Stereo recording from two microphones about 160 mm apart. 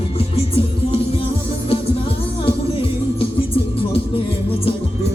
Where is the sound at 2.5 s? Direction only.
35° left (ahead or behind).